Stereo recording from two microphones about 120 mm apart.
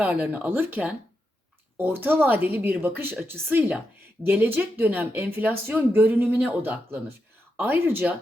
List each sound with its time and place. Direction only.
0.0 s speech: 10° right (ahead or behind)